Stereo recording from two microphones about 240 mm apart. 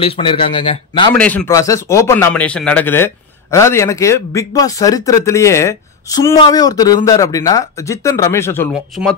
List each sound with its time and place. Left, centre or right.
0.0 s a man's voice: left
1.1 s speech: centre